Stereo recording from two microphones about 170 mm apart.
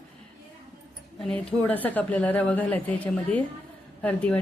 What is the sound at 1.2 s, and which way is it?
A woman's voice, 5° left (ahead or behind).